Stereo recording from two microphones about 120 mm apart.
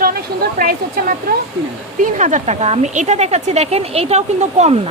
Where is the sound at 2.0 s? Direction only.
90° right; by 4.9 s 60° right (ahead or behind).